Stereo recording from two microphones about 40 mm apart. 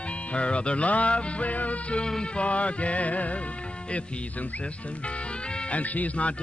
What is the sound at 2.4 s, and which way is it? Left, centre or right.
Music, left.